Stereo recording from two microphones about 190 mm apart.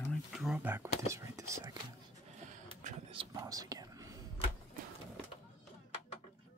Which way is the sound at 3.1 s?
25° right (ahead or behind).